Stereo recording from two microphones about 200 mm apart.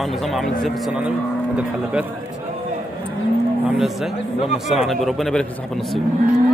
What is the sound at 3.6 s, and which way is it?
Speech, centre (ahead or behind).